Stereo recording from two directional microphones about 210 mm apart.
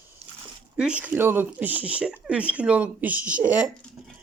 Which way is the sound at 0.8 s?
5° right (ahead or behind).